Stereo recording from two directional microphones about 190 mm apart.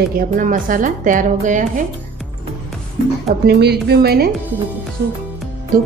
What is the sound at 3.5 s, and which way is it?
Speech, 60° right (ahead or behind).